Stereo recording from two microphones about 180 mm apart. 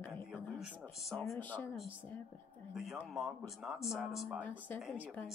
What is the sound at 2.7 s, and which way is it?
Speech, centre (ahead or behind).